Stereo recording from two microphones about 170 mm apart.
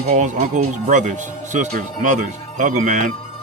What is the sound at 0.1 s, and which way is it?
Speech, 50° right (ahead or behind).